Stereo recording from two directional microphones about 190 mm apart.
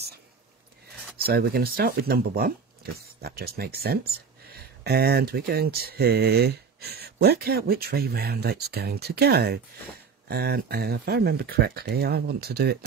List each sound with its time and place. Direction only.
1.1 s speech: 55° right (ahead or behind)